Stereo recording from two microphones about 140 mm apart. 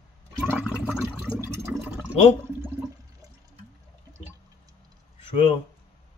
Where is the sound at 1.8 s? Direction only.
10° right (ahead or behind).